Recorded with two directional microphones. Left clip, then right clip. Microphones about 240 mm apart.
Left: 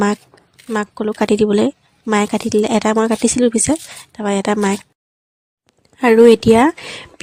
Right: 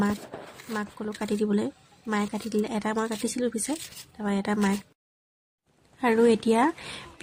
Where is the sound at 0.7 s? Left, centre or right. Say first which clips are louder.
Left 14 dB; left.